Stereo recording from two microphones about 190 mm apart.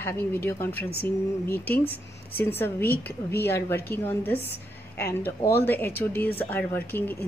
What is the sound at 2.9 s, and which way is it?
Speech, 55° left (ahead or behind).